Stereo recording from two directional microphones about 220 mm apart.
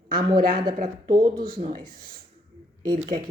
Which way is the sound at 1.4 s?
40° right (ahead or behind).